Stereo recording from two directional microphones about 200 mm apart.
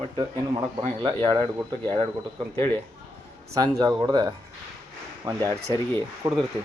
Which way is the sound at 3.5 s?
20° right (ahead or behind).